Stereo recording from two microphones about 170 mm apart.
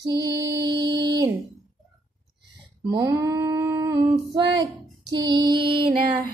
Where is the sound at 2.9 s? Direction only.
20° right (ahead or behind).